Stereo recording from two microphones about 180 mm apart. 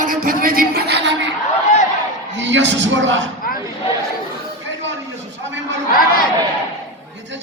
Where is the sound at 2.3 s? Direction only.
90° right.